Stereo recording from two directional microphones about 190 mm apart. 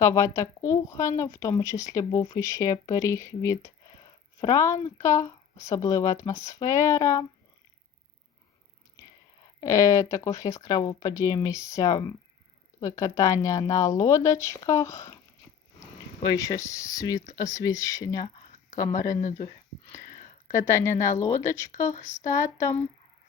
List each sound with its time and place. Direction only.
0.0 s a woman's voice: 15° left (ahead or behind)
9.6 s a woman's voice: 15° left (ahead or behind)
16.2 s a woman's voice: 20° left (ahead or behind)
20.5 s a woman's voice: 15° left (ahead or behind)